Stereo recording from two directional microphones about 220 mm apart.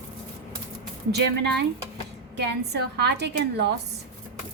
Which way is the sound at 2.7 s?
50° right (ahead or behind).